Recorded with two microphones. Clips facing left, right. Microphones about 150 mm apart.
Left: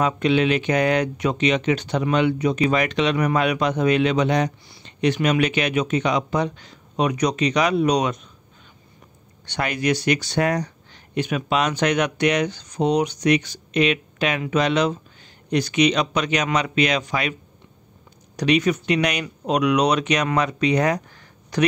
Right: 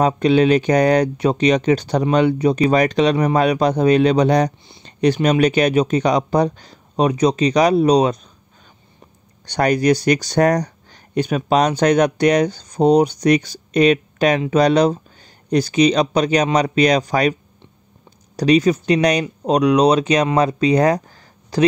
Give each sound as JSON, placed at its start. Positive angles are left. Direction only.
{"t": 0.0, "sound": "speech", "side_deg": -40}
{"t": 9.5, "sound": "speech", "side_deg": -40}